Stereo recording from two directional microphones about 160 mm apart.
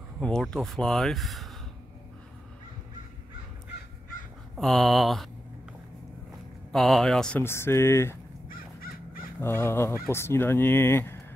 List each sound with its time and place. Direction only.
0.2 s speech: 5° left (ahead or behind)
4.6 s speech: 5° left (ahead or behind)
6.7 s speech: centre (ahead or behind); by 8.2 s 15° left (ahead or behind)
8.5 s crow: 65° left (ahead or behind)
9.4 s speech: 15° left (ahead or behind)